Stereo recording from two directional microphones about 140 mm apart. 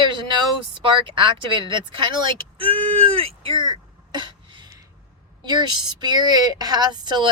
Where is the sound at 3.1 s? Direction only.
40° right (ahead or behind).